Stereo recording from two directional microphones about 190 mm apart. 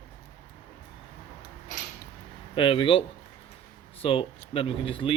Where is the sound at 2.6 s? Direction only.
25° left (ahead or behind).